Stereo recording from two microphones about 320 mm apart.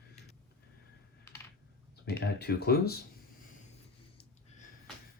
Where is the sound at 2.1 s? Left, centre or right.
Left.